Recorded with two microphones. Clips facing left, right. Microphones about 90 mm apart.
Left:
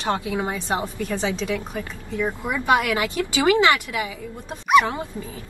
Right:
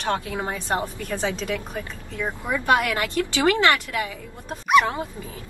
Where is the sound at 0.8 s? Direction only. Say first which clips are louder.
Left 1 dB; 5° right (ahead or behind).